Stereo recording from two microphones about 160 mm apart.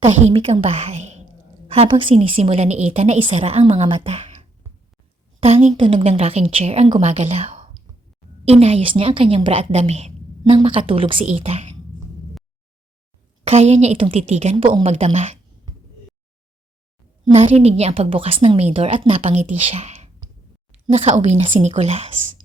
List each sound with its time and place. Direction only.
0.0 s a woman's voice: 45° right (ahead or behind)
13.5 s a woman's voice: 40° right (ahead or behind)
14.5 s a woman's voice: 30° right (ahead or behind)
17.3 s a woman's voice: 45° right (ahead or behind)